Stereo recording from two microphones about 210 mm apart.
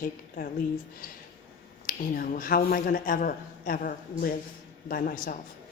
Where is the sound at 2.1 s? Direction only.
40° left (ahead or behind).